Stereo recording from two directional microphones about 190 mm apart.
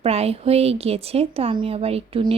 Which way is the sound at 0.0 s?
35° right (ahead or behind).